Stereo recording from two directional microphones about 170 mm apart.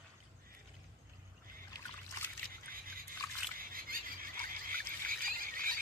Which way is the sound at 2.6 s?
60° right (ahead or behind).